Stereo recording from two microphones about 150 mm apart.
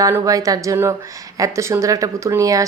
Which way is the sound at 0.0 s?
20° right (ahead or behind).